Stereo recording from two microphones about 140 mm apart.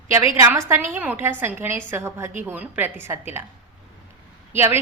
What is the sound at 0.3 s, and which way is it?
A woman's voice, 20° right (ahead or behind).